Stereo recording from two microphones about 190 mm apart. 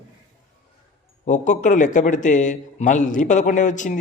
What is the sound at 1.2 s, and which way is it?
A man's voice, 40° left (ahead or behind).